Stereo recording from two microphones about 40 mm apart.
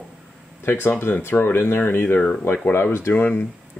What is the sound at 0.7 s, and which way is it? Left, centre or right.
Speech, left.